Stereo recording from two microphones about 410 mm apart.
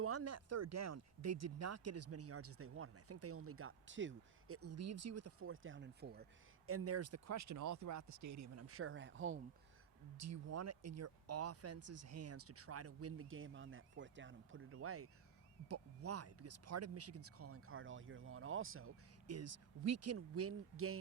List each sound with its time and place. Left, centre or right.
0.0 s speech: right
6.7 s speech: right
10.2 s speech: right